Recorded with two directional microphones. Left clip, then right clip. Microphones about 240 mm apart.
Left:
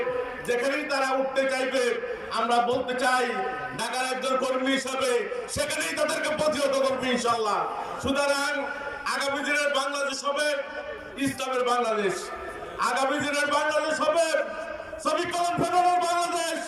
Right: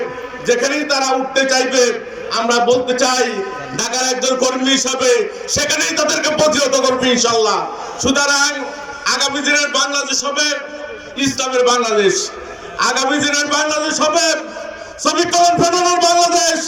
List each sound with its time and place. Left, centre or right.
0.4 s a man's voice: right